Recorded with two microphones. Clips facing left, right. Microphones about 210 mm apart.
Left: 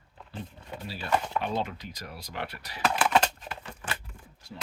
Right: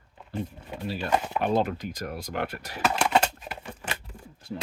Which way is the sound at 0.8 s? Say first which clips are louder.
Right 8 dB; 45° right (ahead or behind).